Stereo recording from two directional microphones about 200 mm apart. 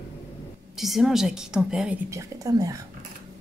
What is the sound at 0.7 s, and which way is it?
A woman's voice, centre (ahead or behind).